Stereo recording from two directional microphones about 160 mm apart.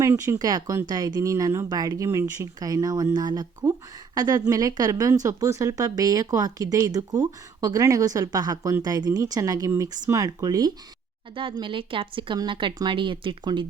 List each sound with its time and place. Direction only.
0.0 s speech: 20° right (ahead or behind)